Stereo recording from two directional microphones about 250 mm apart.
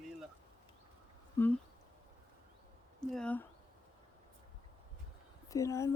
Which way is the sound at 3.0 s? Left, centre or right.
Centre.